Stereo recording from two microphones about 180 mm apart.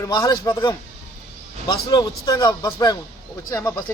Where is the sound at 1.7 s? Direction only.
20° left (ahead or behind).